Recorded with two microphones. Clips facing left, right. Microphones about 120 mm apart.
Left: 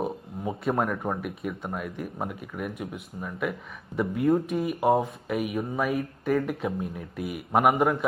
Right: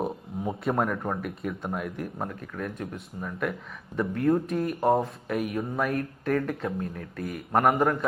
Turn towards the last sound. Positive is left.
turn(degrees=5)  # may be behind; listen again after turning